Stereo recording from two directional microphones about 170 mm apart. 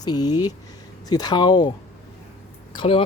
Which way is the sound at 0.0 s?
25° left (ahead or behind).